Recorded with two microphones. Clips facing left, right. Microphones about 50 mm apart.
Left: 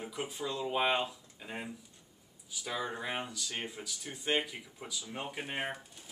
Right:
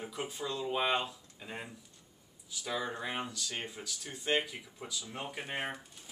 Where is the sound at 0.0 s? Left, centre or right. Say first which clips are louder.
Left 1 dB; centre.